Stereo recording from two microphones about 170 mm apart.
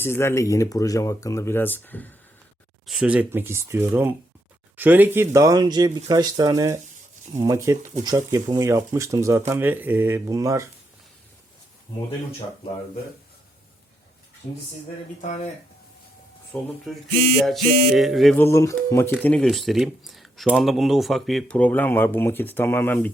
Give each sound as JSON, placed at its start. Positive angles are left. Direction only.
{"t": 0.0, "sound": "speech", "side_deg": 15}
{"t": 2.8, "sound": "speech", "side_deg": -5}
{"t": 16.8, "sound": "speech", "side_deg": 0}
{"t": 18.3, "sound": "speech", "side_deg": 15}
{"t": 19.2, "sound": "speech", "side_deg": 5}